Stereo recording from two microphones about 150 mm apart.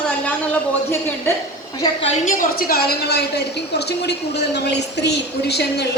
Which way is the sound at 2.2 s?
70° left (ahead or behind).